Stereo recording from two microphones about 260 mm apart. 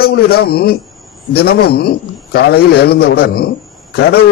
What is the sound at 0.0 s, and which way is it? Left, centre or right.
A man's voice, left.